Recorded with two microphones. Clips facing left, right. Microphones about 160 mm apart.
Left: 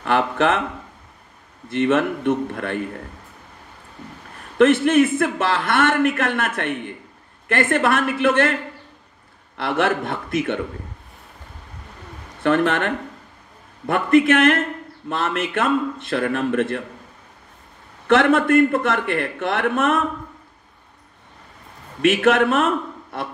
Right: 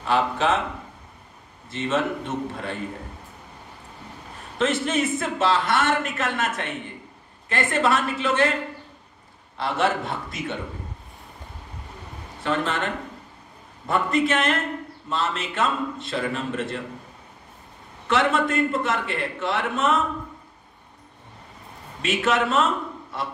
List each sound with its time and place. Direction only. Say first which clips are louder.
0.0 s a sound: left 3 dB; 60° left (ahead or behind)
1.7 s a man's voice: left 6 dB; 60° left (ahead or behind)
4.6 s a man's voice: left 9 dB; 60° left (ahead or behind)
9.6 s a man's voice: left 3 dB; 60° left (ahead or behind)
12.4 s a man's voice: left 7 dB; 60° left (ahead or behind)
18.0 s a man's voice: left 6 dB; 60° left (ahead or behind)
22.0 s a man's voice: left 7 dB; 55° left (ahead or behind)